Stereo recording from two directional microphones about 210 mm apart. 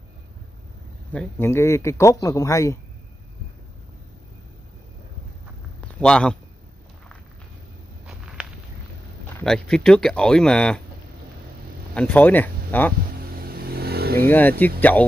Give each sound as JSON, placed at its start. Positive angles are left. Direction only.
{"t": 1.1, "sound": "speech", "side_deg": 10}
{"t": 5.9, "sound": "speech", "side_deg": 5}
{"t": 8.1, "sound": "walk", "side_deg": 0}
{"t": 9.4, "sound": "speech", "side_deg": 5}
{"t": 11.9, "sound": "speech", "side_deg": 5}
{"t": 13.4, "sound": "vehicle", "side_deg": -45}
{"t": 14.6, "sound": "speech", "side_deg": 10}